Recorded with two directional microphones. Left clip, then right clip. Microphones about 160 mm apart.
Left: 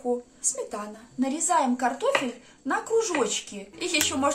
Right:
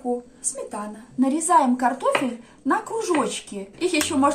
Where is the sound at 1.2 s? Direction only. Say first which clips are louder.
Right 6 dB; centre (ahead or behind).